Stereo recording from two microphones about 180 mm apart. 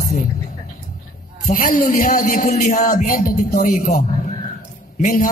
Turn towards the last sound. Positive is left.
turn(degrees=45)  # may be behind; listen again after turning